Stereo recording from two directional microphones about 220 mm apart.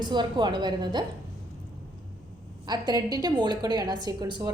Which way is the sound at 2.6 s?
20° right (ahead or behind).